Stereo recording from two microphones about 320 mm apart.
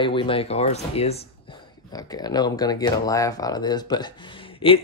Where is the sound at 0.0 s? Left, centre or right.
Centre.